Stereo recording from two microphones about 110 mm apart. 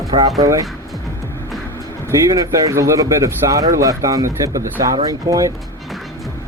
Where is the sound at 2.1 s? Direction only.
30° right (ahead or behind).